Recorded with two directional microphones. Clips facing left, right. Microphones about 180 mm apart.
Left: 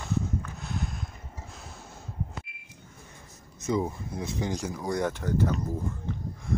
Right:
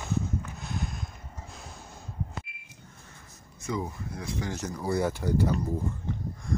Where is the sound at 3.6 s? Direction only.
25° left (ahead or behind).